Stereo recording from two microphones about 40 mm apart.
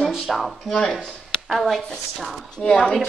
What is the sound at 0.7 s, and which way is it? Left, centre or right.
A woman's voice, centre.